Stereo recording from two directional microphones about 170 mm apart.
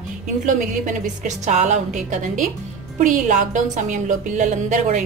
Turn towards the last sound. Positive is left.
turn(degrees=-45)  # may be behind; listen again after turning